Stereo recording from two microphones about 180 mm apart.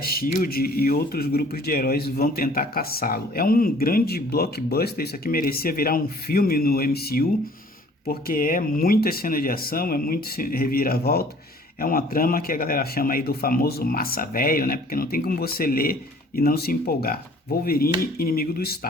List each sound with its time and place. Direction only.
0.0 s speech: 55° left (ahead or behind)